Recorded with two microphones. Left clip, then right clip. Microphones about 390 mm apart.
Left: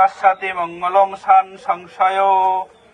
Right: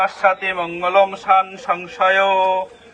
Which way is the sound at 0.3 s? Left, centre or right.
Centre.